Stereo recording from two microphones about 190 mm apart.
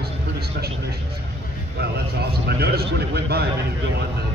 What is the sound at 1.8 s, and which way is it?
A man's voice, 55° right (ahead or behind).